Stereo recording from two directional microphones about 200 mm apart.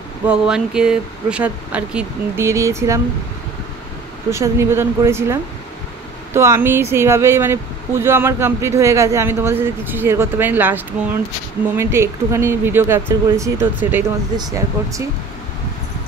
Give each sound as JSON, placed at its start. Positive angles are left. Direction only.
{"t": 0.3, "sound": "speech", "side_deg": -5}
{"t": 4.3, "sound": "speech", "side_deg": -15}